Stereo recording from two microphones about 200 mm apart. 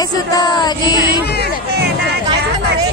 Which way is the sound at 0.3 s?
20° left (ahead or behind).